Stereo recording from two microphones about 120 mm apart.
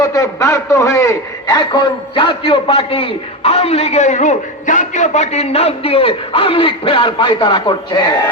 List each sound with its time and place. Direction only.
0.0 s a man's voice: 30° left (ahead or behind)